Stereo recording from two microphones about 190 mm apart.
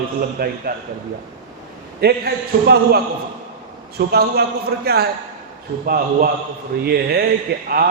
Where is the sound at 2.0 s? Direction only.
55° right (ahead or behind).